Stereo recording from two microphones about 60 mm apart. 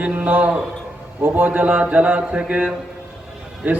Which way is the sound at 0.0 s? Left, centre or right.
Right.